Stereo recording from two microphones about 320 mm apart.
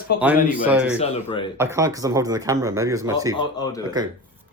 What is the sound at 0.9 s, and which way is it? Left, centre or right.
Speech, centre.